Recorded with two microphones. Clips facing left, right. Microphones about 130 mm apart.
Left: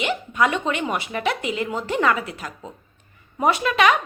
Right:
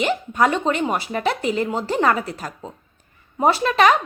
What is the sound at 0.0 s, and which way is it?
Speech, 40° right (ahead or behind).